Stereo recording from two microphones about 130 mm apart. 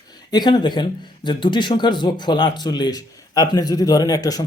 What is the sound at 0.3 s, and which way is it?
Speech, 35° left (ahead or behind).